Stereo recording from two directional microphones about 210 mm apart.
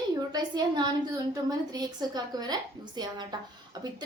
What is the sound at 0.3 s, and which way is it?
A woman's voice, 20° right (ahead or behind).